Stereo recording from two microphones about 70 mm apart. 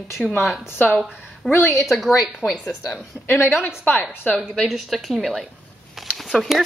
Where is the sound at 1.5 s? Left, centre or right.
Left.